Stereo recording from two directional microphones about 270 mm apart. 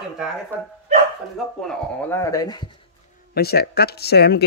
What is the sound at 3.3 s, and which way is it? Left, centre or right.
Speech, left.